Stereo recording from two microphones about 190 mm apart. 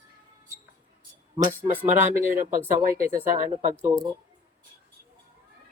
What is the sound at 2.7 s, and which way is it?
Speech, 45° right (ahead or behind).